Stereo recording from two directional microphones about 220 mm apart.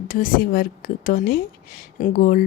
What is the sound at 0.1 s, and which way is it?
A woman's voice, 40° left (ahead or behind).